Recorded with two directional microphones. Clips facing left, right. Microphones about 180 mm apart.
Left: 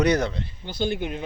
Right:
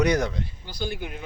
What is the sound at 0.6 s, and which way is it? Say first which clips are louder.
Speech: left 8 dB; 25° left (ahead or behind).